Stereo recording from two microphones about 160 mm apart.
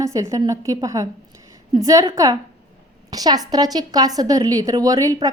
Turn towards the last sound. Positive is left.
turn(degrees=-20)  # may be behind; listen again after turning